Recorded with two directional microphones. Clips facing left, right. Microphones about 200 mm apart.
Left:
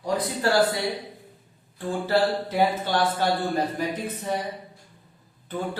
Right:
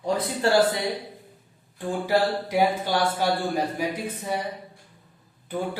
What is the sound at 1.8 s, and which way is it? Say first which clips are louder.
A man's voice: even; 15° right (ahead or behind).